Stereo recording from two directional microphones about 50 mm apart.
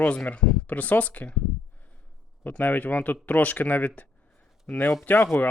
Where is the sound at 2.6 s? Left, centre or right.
Left.